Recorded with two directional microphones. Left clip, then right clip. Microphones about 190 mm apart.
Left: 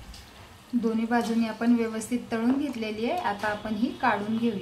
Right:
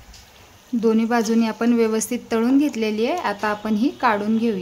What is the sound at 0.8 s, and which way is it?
Speech, 60° right (ahead or behind).